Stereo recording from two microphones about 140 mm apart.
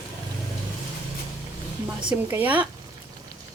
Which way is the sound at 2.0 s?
10° right (ahead or behind).